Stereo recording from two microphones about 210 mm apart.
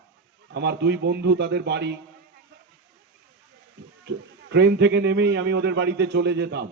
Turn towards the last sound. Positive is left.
turn(degrees=-55)  # may be behind; listen again after turning